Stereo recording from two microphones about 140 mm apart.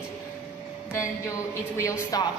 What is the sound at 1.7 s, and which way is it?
Speech, 20° left (ahead or behind).